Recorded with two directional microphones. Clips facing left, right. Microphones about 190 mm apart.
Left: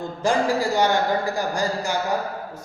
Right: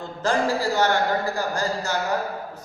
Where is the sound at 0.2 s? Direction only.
15° left (ahead or behind).